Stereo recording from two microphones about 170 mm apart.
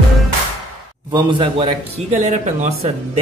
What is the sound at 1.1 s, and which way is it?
Speech, 30° right (ahead or behind).